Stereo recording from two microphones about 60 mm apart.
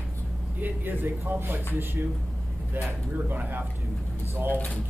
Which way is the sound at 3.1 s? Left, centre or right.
Right.